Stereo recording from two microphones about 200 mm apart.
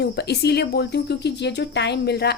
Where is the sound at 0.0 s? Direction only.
55° left (ahead or behind).